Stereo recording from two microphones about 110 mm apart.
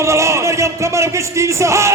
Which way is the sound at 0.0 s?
25° right (ahead or behind).